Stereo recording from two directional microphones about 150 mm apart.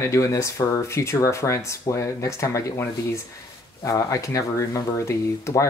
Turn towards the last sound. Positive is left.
turn(degrees=20)  # may be behind; listen again after turning